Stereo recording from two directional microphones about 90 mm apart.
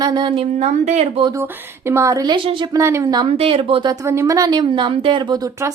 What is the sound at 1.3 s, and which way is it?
Speech, 30° right (ahead or behind).